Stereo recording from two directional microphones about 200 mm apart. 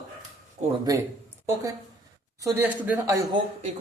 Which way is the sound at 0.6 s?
35° right (ahead or behind).